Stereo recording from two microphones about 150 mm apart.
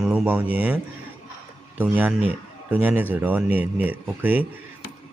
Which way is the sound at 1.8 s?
10° right (ahead or behind).